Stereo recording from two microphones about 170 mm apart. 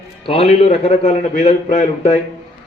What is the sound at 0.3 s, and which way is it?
A man's voice, 35° left (ahead or behind).